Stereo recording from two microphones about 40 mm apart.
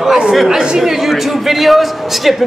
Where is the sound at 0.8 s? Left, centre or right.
Centre.